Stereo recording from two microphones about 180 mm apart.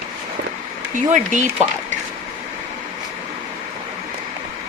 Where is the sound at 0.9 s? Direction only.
45° right (ahead or behind).